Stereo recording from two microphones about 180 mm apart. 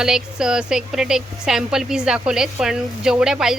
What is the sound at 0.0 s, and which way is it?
Speech, 5° right (ahead or behind).